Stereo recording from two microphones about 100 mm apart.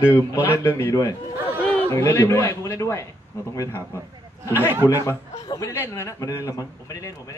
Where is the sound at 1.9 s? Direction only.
30° left (ahead or behind).